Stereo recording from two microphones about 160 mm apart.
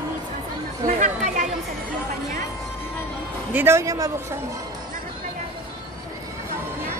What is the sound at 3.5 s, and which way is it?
Speech, 15° right (ahead or behind).